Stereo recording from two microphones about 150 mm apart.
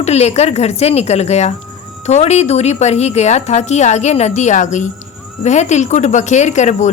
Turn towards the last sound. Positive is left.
turn(degrees=50)  # may be behind; listen again after turning